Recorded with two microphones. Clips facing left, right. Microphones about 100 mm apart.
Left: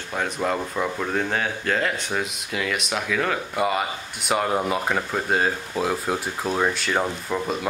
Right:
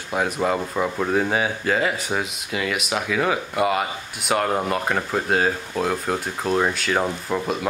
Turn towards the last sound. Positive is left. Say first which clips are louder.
# right 2 dB
turn(degrees=-5)  # may be behind; listen again after turning